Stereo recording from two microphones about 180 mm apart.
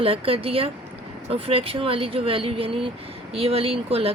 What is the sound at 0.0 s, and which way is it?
A woman's voice, 30° right (ahead or behind).